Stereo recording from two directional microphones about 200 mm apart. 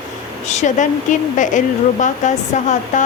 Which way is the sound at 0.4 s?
35° left (ahead or behind).